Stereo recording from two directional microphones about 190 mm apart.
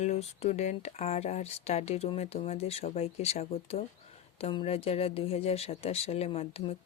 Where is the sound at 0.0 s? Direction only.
35° left (ahead or behind).